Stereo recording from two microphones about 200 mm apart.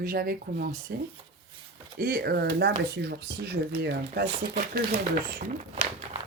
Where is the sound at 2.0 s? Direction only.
50° right (ahead or behind).